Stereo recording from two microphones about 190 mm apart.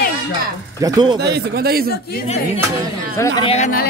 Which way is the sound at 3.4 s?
30° left (ahead or behind).